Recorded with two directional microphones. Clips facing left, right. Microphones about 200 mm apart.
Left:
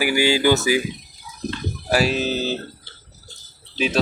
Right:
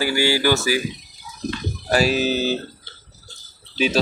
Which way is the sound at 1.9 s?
Centre (ahead or behind).